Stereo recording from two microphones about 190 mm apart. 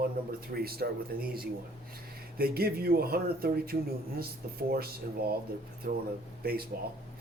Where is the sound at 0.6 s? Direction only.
55° right (ahead or behind).